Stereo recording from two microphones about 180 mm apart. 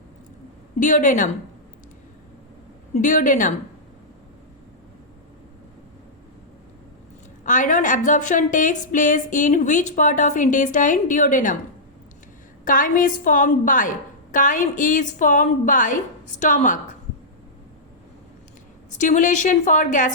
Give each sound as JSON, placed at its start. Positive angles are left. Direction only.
{"t": 0.8, "sound": "a woman's voice", "side_deg": 45}
{"t": 2.9, "sound": "a woman's voice", "side_deg": 45}
{"t": 7.4, "sound": "a woman's voice", "side_deg": 45}
{"t": 12.6, "sound": "a woman's voice", "side_deg": 50}
{"t": 18.9, "sound": "a woman's voice", "side_deg": 45}